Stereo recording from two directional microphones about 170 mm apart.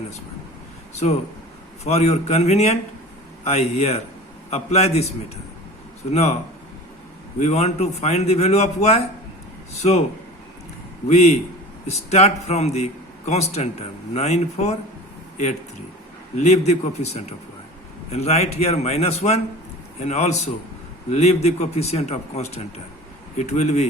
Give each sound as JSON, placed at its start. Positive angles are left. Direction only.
{"t": 1.8, "sound": "a man's voice", "side_deg": 40}
{"t": 7.3, "sound": "a man's voice", "side_deg": 40}
{"t": 11.1, "sound": "a man's voice", "side_deg": 40}
{"t": 16.4, "sound": "a man's voice", "side_deg": 40}